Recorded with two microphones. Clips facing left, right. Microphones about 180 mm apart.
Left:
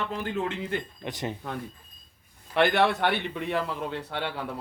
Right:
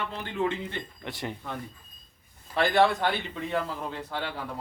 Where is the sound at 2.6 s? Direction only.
65° left (ahead or behind).